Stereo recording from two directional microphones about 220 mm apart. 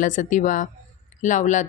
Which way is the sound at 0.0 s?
35° left (ahead or behind).